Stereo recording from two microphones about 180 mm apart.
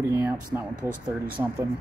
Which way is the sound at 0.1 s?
20° right (ahead or behind).